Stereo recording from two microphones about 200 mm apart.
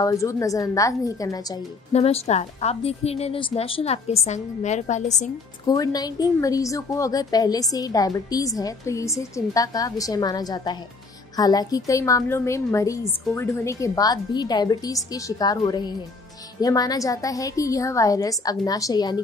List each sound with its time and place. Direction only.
0.0 s a woman's voice: 15° left (ahead or behind)
1.9 s a woman's voice: 30° left (ahead or behind)
5.7 s a woman's voice: 20° left (ahead or behind)